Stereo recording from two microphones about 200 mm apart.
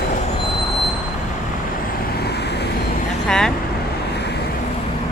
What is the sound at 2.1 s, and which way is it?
Vehicle, 55° left (ahead or behind).